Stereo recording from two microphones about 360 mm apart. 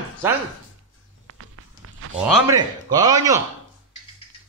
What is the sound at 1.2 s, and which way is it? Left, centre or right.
Walk, right.